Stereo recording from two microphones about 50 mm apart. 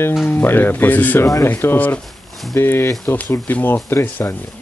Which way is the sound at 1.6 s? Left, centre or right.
Left.